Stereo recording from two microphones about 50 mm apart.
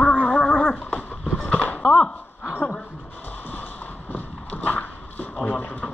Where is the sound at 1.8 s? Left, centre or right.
Left.